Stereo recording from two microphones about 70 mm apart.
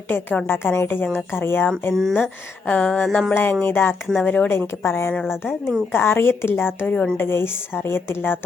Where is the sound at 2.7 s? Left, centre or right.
Centre.